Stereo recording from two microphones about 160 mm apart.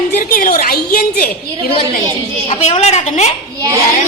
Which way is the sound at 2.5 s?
40° left (ahead or behind).